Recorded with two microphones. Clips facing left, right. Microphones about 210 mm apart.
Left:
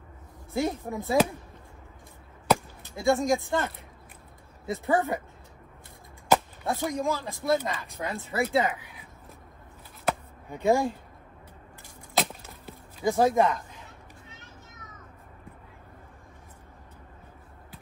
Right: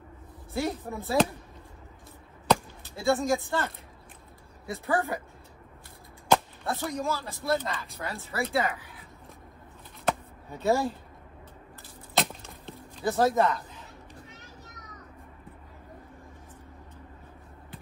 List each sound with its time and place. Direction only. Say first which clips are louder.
0.5 s speech: left 2 dB; 15° left (ahead or behind)
2.4 s chop: even; 10° left (ahead or behind)
4.8 s speech: left 3 dB; 15° left (ahead or behind)
6.6 s speech: left 3 dB; 15° left (ahead or behind)
10.5 s speech: left 2 dB; 15° left (ahead or behind)
12.2 s a sound: even; 5° left (ahead or behind)